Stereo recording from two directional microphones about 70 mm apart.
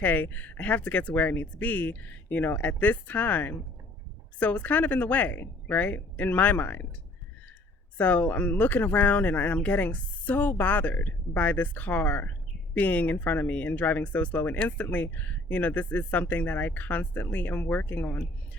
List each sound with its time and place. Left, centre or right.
0.0 s speech: left
7.9 s speech: left